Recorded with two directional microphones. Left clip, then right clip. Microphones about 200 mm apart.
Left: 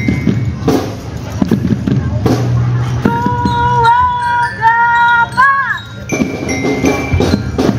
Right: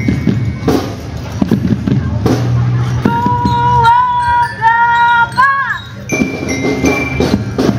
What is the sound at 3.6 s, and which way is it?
Female singing, 20° left (ahead or behind).